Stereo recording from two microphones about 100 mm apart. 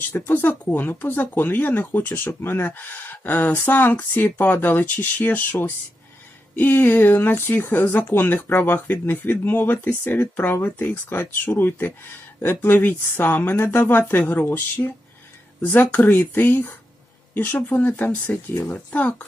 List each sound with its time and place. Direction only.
0.1 s speech: 20° left (ahead or behind)